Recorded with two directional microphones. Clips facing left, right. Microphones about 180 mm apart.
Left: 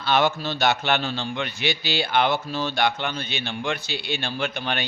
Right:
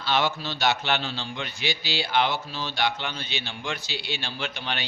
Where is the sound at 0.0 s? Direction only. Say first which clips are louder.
Left 4 dB; 50° left (ahead or behind).